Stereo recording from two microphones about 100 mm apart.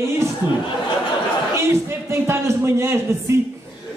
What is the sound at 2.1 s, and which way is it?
Speech, 25° right (ahead or behind).